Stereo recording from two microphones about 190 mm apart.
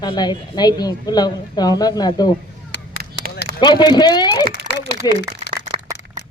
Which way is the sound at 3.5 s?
25° left (ahead or behind).